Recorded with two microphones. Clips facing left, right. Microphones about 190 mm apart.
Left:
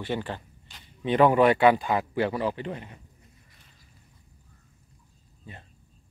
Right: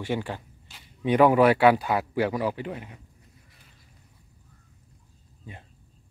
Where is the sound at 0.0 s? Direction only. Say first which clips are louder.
Right 1 dB; 10° right (ahead or behind).